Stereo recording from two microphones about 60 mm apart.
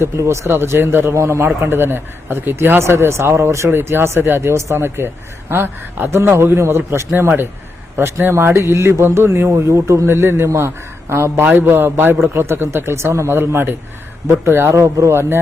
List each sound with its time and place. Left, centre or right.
0.0 s speech: right
1.1 s speech: right
1.6 s speech: right
3.7 s speech: right
6.1 s speech: right
9.5 s speech: right
11.4 s speech: right